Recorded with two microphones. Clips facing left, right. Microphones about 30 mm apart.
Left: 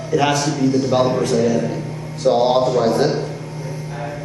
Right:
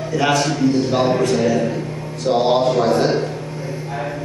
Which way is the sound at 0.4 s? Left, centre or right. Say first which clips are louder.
Right 1 dB; right.